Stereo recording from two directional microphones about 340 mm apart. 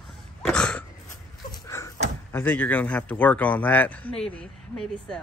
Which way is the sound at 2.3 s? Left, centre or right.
Centre.